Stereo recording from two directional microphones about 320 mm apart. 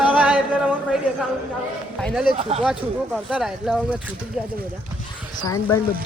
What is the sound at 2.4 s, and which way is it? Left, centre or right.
Speech, centre.